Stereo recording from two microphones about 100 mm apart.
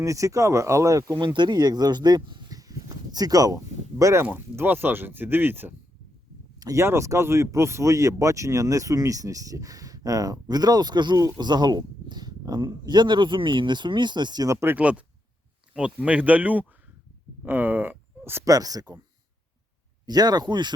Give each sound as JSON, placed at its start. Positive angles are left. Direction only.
{"t": 0.0, "sound": "speech", "side_deg": -30}
{"t": 1.2, "sound": "speech", "side_deg": -50}
{"t": 6.6, "sound": "speech", "side_deg": -30}
{"t": 14.4, "sound": "speech", "side_deg": -25}
{"t": 14.8, "sound": "speech", "side_deg": -15}
{"t": 18.4, "sound": "speech", "side_deg": -40}
{"t": 20.1, "sound": "speech", "side_deg": -40}